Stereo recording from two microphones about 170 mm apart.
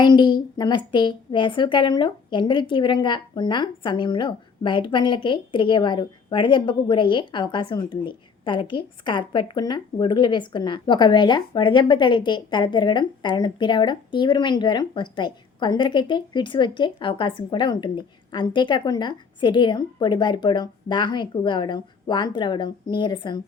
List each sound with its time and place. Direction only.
0.0 s a woman's voice: 25° left (ahead or behind)